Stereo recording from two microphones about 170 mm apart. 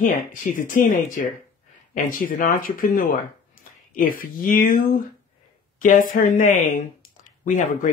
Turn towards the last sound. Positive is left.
turn(degrees=50)  # may be behind; listen again after turning